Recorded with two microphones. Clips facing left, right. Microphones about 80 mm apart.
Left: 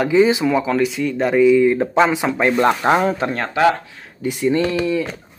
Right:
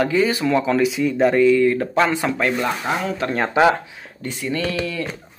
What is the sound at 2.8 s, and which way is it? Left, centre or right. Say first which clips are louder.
Speech: left 9 dB; left.